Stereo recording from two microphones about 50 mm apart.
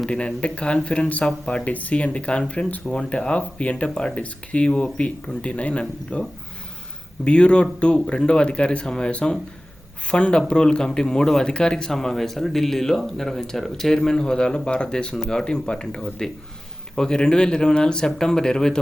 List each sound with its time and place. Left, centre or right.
0.1 s speech: left
3.8 s speech: centre
4.1 s speech: left
7.3 s speech: left